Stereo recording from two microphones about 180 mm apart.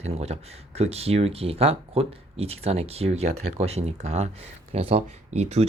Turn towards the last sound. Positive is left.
turn(degrees=-35)  # may be behind; listen again after turning